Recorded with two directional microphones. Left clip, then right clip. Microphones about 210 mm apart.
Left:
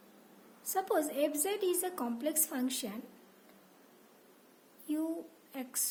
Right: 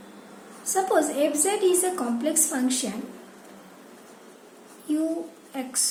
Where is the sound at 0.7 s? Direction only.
50° left (ahead or behind).